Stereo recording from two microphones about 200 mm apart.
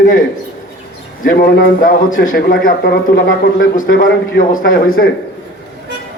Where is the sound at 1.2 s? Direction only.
50° left (ahead or behind).